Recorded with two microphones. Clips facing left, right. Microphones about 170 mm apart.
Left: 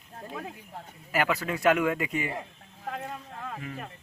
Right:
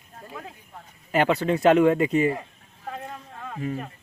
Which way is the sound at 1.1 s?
30° right (ahead or behind).